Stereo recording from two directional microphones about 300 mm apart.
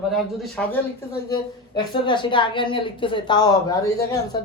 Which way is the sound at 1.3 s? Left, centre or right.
Centre.